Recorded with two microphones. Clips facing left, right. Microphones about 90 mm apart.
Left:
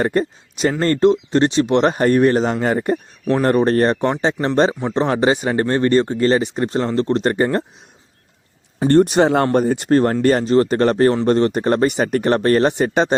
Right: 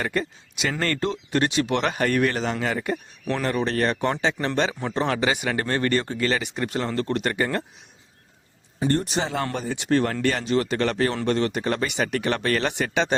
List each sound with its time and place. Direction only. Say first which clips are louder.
0.0 s speech: left 8 dB; 40° left (ahead or behind)
8.8 s speech: left 11 dB; 65° left (ahead or behind)
9.5 s speech: left 9 dB; 45° left (ahead or behind)